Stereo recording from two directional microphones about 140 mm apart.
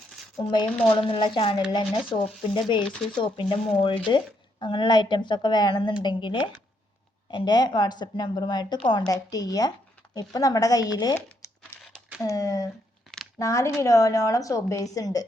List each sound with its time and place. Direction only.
0.4 s a woman's voice: 35° left (ahead or behind)